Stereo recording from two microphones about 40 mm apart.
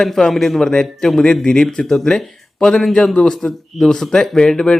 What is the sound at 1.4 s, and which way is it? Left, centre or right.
Speech, centre.